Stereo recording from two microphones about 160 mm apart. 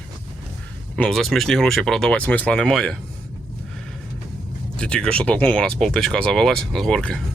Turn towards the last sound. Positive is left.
turn(degrees=5)  # may be behind; listen again after turning